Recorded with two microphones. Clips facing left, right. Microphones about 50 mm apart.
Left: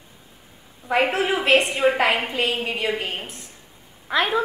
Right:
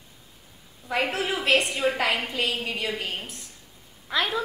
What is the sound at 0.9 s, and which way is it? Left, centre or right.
A woman's voice, left.